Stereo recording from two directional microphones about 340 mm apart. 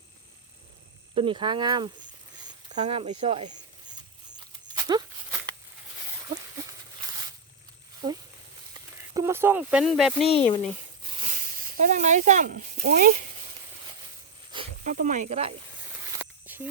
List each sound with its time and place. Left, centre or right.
1.1 s speech: centre
4.7 s walk: centre
9.1 s speech: centre
10.2 s speech: centre
11.7 s speech: right
14.5 s speech: centre
16.1 s snake: centre